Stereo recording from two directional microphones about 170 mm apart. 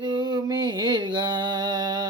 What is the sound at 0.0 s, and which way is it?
Mantra, 25° right (ahead or behind).